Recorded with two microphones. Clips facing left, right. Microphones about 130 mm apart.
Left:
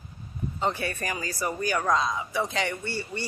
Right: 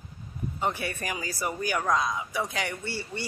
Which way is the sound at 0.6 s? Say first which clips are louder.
Left 2 dB; 15° right (ahead or behind).